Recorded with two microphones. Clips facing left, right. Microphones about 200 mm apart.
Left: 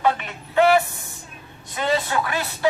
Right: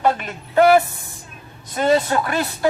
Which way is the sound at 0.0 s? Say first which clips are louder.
Right 2 dB; 45° right (ahead or behind).